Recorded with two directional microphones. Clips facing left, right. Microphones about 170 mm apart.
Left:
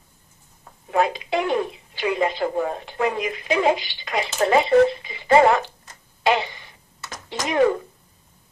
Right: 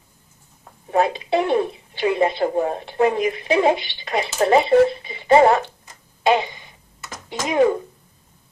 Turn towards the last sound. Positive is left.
turn(degrees=-20)  # may be behind; listen again after turning